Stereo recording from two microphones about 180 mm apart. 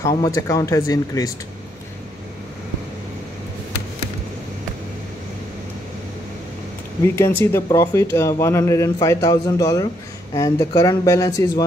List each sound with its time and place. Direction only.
0.1 s speech: 20° left (ahead or behind)
7.2 s a man's voice: 15° left (ahead or behind)